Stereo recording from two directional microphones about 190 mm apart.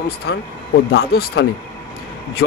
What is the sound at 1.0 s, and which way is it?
Speech, 55° left (ahead or behind).